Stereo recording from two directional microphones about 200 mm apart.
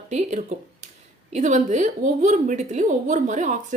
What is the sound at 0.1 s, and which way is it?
A woman's voice, 35° right (ahead or behind).